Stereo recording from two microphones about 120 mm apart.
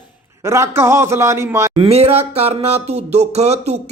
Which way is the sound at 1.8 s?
55° right (ahead or behind).